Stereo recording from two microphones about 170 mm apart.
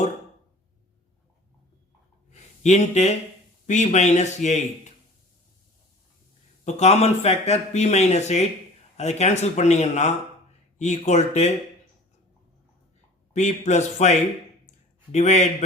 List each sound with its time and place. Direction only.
2.3 s a sound: 40° left (ahead or behind)
3.7 s speech: 45° left (ahead or behind)
6.7 s speech: 40° left (ahead or behind)
13.3 s speech: 45° left (ahead or behind)